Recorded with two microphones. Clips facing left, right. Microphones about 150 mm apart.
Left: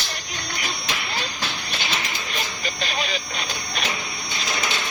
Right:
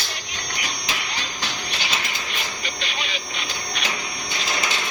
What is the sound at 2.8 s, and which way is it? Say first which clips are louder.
Vehicle: left 6 dB; 40° left (ahead or behind).